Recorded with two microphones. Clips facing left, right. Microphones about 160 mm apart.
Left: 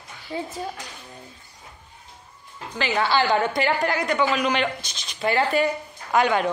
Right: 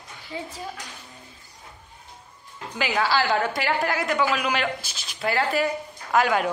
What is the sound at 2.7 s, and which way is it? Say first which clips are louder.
A woman's voice: left 1 dB; 5° right (ahead or behind).